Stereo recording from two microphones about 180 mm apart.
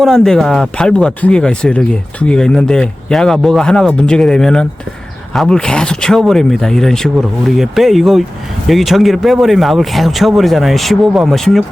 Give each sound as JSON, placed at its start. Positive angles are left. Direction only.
{"t": 0.0, "sound": "speech", "side_deg": 0}